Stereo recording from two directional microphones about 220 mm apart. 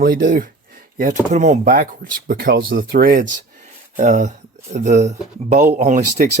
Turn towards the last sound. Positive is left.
turn(degrees=-35)  # may be behind; listen again after turning